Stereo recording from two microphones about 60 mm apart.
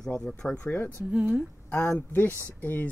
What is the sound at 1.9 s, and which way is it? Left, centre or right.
Speech, left.